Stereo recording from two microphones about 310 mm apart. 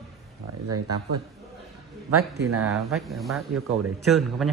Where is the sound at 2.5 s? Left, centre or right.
Right.